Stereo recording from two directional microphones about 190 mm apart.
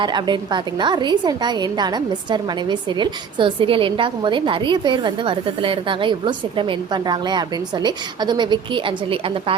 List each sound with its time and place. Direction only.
0.0 s a woman's voice: 25° right (ahead or behind)